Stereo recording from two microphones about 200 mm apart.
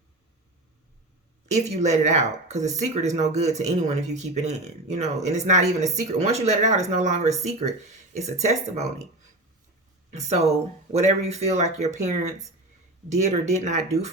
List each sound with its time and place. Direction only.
1.5 s speech: 35° right (ahead or behind)
10.1 s speech: 35° right (ahead or behind)